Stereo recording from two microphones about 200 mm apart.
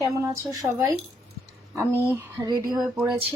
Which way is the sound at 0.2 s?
15° right (ahead or behind).